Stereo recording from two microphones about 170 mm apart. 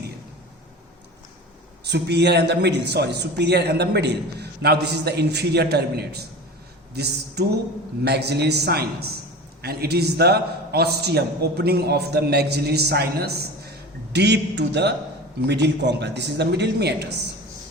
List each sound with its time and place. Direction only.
1.8 s a man's voice: 80° right
14.1 s a man's voice: 85° right